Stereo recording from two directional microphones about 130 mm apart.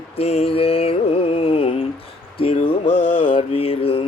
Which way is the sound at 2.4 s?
45° left (ahead or behind).